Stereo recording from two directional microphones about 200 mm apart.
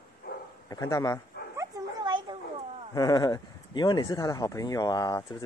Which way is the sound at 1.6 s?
25° right (ahead or behind).